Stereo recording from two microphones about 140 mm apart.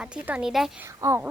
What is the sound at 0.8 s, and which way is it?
Speech, 20° right (ahead or behind).